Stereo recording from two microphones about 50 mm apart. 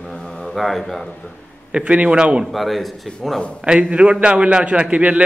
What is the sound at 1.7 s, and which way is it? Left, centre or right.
Speech, right.